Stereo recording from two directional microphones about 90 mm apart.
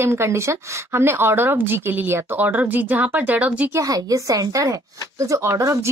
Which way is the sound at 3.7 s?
40° right (ahead or behind).